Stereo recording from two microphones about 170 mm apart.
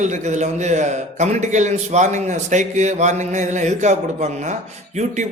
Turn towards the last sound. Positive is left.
turn(degrees=-45)  # may be behind; listen again after turning